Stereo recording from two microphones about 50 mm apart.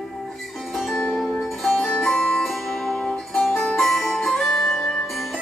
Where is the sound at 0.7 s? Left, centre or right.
Centre.